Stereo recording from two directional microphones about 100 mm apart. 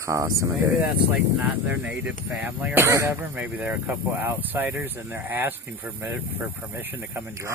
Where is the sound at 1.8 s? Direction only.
15° right (ahead or behind).